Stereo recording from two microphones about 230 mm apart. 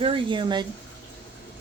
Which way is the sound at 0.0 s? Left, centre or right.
Right.